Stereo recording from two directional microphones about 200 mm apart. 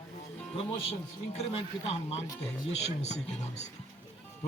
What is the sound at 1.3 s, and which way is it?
A man's voice, 30° left (ahead or behind).